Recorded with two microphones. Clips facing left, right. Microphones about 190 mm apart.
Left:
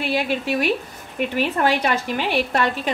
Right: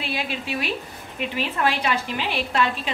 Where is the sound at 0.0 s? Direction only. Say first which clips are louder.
Left 7 dB; 55° left (ahead or behind).